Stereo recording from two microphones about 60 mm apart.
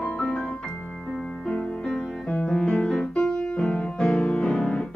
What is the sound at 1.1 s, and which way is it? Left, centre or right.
Music, centre.